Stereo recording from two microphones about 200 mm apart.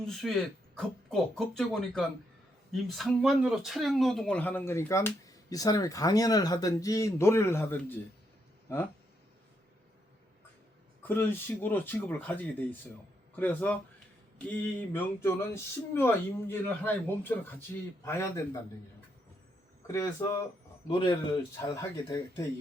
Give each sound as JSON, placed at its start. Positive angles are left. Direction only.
{"t": 0.1, "sound": "speech", "side_deg": 0}
{"t": 11.0, "sound": "speech", "side_deg": 10}
{"t": 14.9, "sound": "speech", "side_deg": 10}
{"t": 19.9, "sound": "a man's voice", "side_deg": 15}